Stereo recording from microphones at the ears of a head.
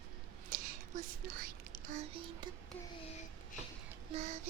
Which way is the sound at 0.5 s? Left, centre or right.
Right.